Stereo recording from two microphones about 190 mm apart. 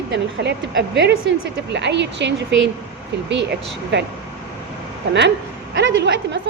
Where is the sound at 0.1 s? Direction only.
65° right (ahead or behind).